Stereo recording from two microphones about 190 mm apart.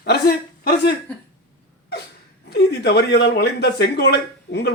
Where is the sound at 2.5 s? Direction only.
60° left (ahead or behind).